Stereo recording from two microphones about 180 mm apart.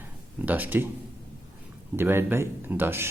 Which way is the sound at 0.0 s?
10° right (ahead or behind).